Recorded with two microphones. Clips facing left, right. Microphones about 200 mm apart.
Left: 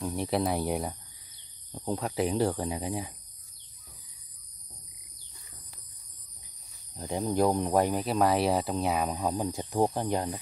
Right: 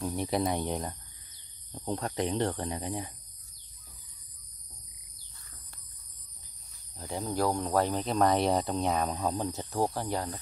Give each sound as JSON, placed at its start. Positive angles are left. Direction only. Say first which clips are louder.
{"t": 0.0, "sound": "speech", "louder": "left 1 dB", "side_deg": 0}
{"t": 7.0, "sound": "speech", "louder": "left 4 dB", "side_deg": 15}
{"t": 9.1, "sound": "speech", "louder": "left 1 dB", "side_deg": 15}